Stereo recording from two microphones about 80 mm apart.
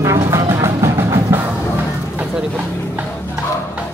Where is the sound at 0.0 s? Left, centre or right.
Right.